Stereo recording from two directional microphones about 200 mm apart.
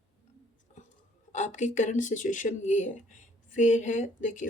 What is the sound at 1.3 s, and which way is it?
Speech, 35° left (ahead or behind).